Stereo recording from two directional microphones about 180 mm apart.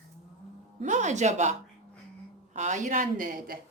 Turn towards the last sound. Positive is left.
turn(degrees=-50)  # may be behind; listen again after turning